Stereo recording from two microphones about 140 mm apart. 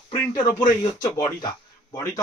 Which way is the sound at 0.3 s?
30° left (ahead or behind).